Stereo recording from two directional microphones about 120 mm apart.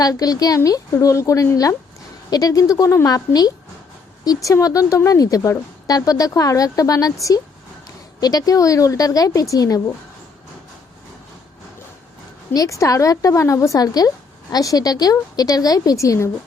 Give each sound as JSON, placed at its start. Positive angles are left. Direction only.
{"t": 0.0, "sound": "a woman's voice", "side_deg": 30}
{"t": 12.5, "sound": "a woman's voice", "side_deg": 25}